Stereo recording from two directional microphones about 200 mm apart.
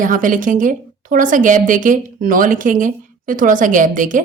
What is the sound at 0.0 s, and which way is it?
A woman's voice, 40° right (ahead or behind).